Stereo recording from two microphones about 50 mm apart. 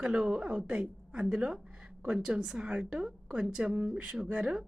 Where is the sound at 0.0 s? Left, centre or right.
Centre.